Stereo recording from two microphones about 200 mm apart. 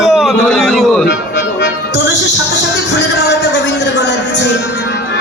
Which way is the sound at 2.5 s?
60° left (ahead or behind).